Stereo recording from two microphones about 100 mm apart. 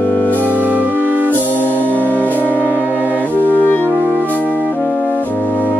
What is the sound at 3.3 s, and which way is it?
Clarinet, 20° right (ahead or behind).